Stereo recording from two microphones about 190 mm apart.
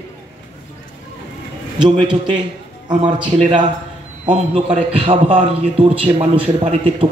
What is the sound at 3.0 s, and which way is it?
A man's voice, 25° right (ahead or behind).